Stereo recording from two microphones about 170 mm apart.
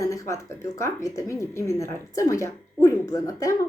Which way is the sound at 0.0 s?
20° left (ahead or behind).